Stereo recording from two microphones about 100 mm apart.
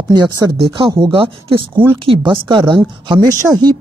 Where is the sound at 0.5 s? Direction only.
60° right (ahead or behind).